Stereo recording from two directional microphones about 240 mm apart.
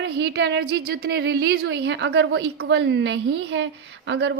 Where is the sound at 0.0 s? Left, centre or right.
Right.